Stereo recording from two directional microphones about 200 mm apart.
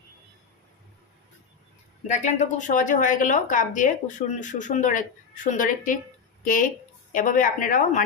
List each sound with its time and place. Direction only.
2.0 s a woman's voice: 40° left (ahead or behind)